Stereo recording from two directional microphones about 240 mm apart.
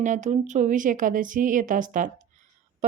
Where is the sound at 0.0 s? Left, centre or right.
Right.